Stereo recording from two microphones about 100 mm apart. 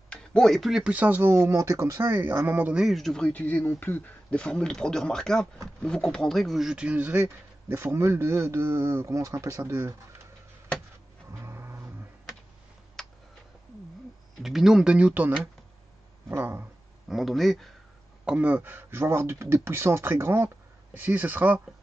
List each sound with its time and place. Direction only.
0.1 s speech: 10° left (ahead or behind)
0.9 s speech: 15° right (ahead or behind)
2.7 s speech: 5° right (ahead or behind); by 9.9 s 35° right (ahead or behind)
11.3 s vehicle: 25° right (ahead or behind)
13.0 s tick: 5° left (ahead or behind)
14.4 s speech: 5° right (ahead or behind); by 16.6 s 25° right (ahead or behind)
17.1 s speech: centre (ahead or behind)
18.2 s speech: 10° right (ahead or behind)